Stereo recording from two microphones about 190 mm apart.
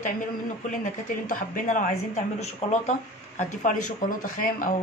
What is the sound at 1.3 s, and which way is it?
Speech, 40° left (ahead or behind).